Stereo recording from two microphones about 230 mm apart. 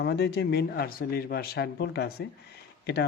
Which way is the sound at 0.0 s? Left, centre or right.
Left.